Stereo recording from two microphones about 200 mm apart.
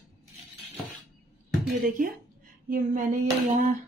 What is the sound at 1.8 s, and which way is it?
Speech, 45° right (ahead or behind).